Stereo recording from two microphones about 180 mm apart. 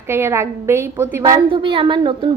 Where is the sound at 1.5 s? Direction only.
30° right (ahead or behind).